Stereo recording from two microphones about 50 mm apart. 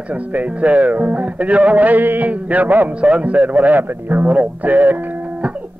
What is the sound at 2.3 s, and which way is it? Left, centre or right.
Speech, right.